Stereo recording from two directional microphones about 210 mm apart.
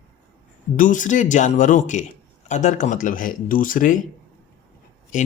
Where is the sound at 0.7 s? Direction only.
40° left (ahead or behind).